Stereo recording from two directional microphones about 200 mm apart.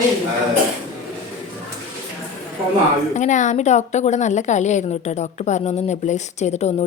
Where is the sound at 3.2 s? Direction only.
40° left (ahead or behind).